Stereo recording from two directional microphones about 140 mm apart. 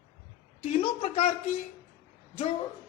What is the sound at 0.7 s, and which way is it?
Speech, 45° left (ahead or behind).